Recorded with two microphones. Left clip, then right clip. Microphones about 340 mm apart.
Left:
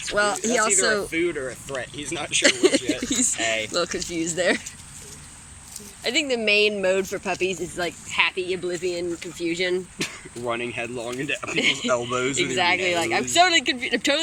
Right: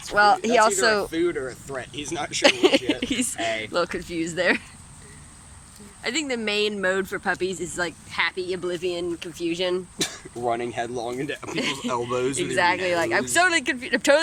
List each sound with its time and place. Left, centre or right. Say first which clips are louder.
0.2 s speech: right 5 dB; centre
1.1 s speech: even; right
2.4 s speech: right 1 dB; centre
6.0 s speech: left 3 dB; centre
10.0 s a sound: right 3 dB; right
10.8 s speech: right 1 dB; right
12.5 s speech: right 1 dB; centre